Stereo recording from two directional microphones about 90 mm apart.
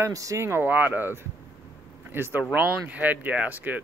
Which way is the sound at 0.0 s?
40° right (ahead or behind).